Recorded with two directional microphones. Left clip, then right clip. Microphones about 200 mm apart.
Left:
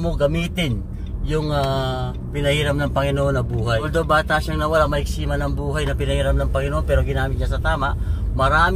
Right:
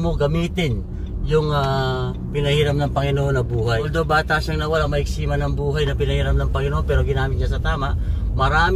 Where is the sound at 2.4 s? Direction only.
25° left (ahead or behind).